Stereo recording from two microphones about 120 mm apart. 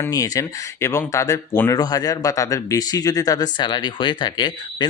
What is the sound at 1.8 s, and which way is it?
Speech, 30° left (ahead or behind).